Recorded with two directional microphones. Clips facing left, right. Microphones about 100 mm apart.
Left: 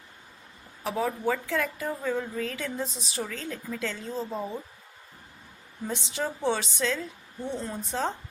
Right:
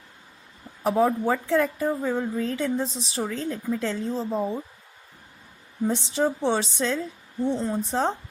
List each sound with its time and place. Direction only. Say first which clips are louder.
0.9 s a woman's voice: right 6 dB; 35° right (ahead or behind)
5.9 s a woman's voice: right 6 dB; 35° right (ahead or behind)